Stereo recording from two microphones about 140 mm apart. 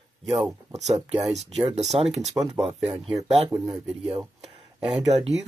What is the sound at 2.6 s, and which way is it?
Speech, 45° right (ahead or behind).